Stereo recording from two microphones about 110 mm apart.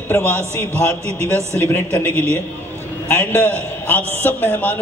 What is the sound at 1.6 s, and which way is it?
A man's voice, 20° left (ahead or behind).